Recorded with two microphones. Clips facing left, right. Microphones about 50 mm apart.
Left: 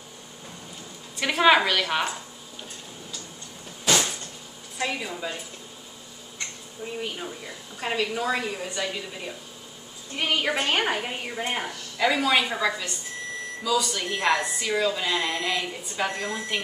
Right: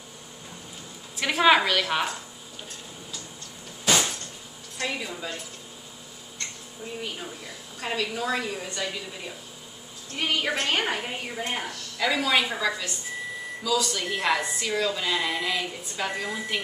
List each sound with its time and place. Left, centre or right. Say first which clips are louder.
1.1 s a woman's voice: left 1 dB; centre
3.8 s a sound: even; centre
4.7 s a woman's voice: left 2 dB; centre
7.0 s a woman's voice: left 3 dB; centre